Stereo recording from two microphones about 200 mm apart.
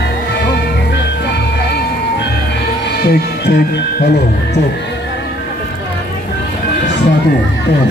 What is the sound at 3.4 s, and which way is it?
Jingle bell, 55° left (ahead or behind).